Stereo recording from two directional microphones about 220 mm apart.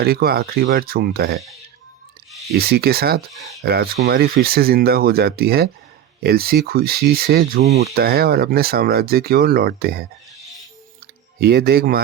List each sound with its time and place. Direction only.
0.0 s speech: 45° right (ahead or behind)
2.5 s speech: 45° right (ahead or behind)
7.9 s speech: 45° right (ahead or behind)
11.0 s a sound: 45° right (ahead or behind)